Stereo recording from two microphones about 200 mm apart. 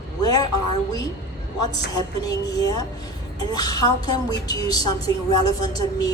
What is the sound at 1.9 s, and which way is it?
A woman's voice, 20° left (ahead or behind).